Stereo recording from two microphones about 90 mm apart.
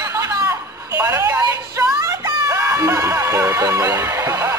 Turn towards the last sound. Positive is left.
turn(degrees=-35)  # may be behind; listen again after turning